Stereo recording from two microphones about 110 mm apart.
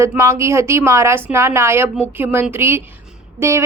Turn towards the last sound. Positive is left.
turn(degrees=-25)  # may be behind; listen again after turning